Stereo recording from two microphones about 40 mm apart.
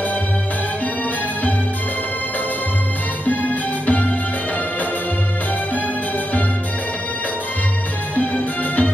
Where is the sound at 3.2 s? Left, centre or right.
Left.